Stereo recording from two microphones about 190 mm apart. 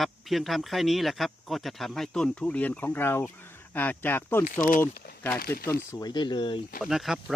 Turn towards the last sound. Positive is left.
turn(degrees=0)  # may be behind; listen again after turning